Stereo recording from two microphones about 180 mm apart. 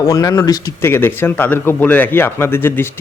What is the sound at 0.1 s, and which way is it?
Speech, 20° left (ahead or behind).